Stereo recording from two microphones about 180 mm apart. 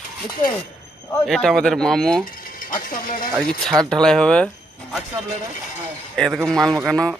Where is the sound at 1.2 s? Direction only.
Centre (ahead or behind).